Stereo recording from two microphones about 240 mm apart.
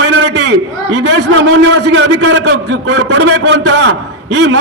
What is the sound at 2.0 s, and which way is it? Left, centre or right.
Speech, right.